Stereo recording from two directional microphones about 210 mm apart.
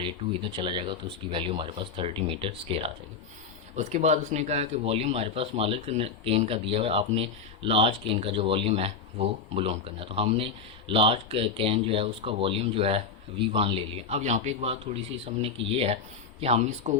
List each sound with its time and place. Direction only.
0.5 s speech: 25° right (ahead or behind)